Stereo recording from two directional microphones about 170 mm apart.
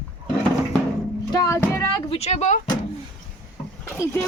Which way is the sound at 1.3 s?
20° left (ahead or behind).